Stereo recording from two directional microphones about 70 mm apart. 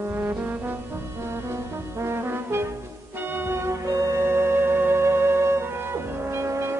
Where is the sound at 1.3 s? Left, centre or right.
Right.